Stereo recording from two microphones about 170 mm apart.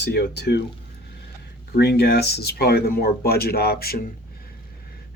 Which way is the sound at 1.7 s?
75° left (ahead or behind).